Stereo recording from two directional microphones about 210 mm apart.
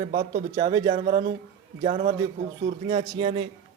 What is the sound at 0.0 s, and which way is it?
A man's voice, 25° right (ahead or behind).